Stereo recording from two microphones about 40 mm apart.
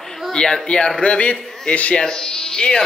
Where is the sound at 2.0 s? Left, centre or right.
Centre.